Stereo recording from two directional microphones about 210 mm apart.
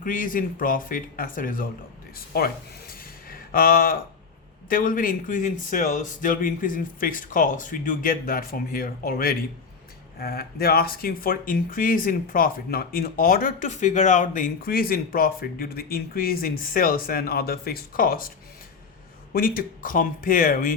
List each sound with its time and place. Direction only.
0.0 s speech: 40° left (ahead or behind)
19.3 s speech: 45° left (ahead or behind)